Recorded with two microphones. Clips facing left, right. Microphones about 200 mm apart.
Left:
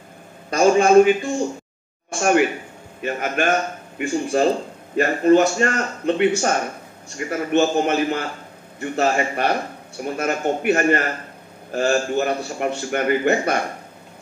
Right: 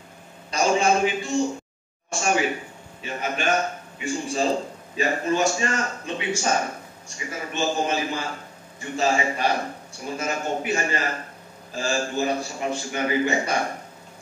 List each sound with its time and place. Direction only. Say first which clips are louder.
0.5 s a man's voice: left 6 dB; 55° left (ahead or behind)